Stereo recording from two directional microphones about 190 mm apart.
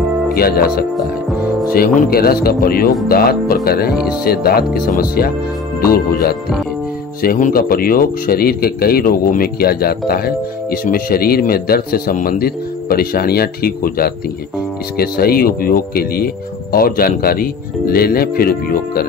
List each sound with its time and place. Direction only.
0.3 s a man's voice: 55° left (ahead or behind)